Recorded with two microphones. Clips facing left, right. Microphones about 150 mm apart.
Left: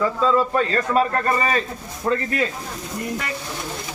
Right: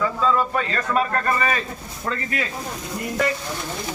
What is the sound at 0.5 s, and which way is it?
A man's voice, 35° left (ahead or behind).